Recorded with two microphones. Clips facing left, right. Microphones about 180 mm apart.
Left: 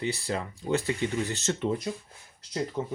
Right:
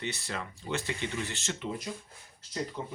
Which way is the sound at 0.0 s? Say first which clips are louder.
Left 6 dB; 35° left (ahead or behind).